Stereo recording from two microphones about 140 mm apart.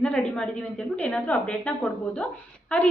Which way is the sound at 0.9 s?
10° left (ahead or behind).